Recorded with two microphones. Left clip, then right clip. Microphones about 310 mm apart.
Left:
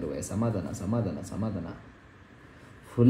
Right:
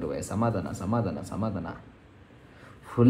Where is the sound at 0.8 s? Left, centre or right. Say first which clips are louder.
Right 3 dB; right.